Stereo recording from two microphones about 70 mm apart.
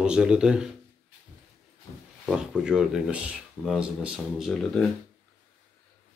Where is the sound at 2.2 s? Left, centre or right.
Centre.